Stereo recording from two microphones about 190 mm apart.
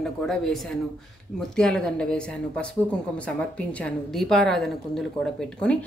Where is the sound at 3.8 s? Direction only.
Centre (ahead or behind).